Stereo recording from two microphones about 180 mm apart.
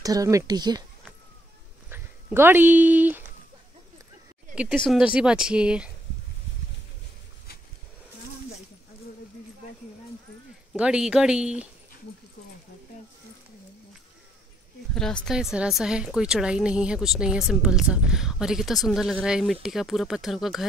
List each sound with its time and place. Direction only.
0.0 s speech: 20° right (ahead or behind)
1.9 s speech: 10° right (ahead or behind)
4.6 s speech: centre (ahead or behind)
10.7 s speech: 5° right (ahead or behind)
15.0 s speech: 5° left (ahead or behind)